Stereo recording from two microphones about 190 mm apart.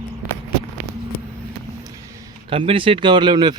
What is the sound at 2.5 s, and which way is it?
Speech, 25° right (ahead or behind).